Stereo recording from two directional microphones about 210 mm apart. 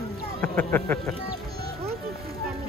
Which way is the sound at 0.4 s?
5° left (ahead or behind).